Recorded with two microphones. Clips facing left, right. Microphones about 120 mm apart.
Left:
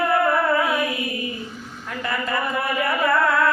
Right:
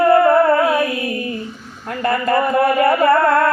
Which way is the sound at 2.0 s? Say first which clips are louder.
Right 9 dB; 50° right (ahead or behind).